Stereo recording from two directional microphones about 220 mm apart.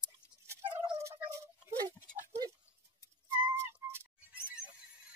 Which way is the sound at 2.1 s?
35° right (ahead or behind).